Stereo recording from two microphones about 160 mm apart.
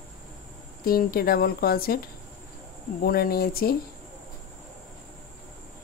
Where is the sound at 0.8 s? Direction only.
70° left (ahead or behind).